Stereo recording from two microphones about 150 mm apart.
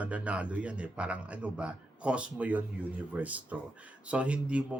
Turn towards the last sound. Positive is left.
turn(degrees=-10)  # may be behind; listen again after turning